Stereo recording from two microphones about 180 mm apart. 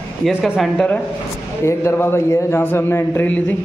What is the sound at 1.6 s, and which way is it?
A man's voice, 15° left (ahead or behind).